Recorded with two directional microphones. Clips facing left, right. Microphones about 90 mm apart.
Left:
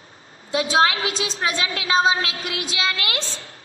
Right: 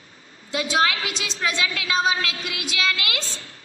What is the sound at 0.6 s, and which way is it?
A woman's voice, 35° left (ahead or behind).